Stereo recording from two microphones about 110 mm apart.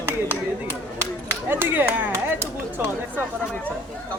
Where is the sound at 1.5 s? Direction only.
20° right (ahead or behind).